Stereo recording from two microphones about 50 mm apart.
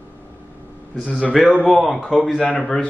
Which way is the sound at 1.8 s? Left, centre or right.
Centre.